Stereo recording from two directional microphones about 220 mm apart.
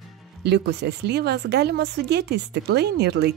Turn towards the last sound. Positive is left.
turn(degrees=-50)  # may be behind; listen again after turning